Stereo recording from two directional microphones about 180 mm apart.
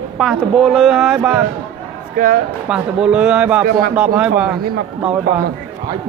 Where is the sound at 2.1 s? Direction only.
50° right (ahead or behind).